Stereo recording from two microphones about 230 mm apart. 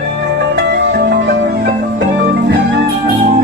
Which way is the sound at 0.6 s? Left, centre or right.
Right.